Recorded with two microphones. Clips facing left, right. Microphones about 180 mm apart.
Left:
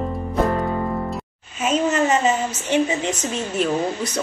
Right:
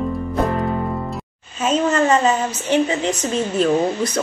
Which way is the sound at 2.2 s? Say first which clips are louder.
Right 2 dB; 15° left (ahead or behind).